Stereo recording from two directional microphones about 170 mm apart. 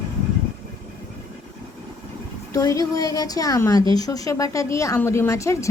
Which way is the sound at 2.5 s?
20° left (ahead or behind).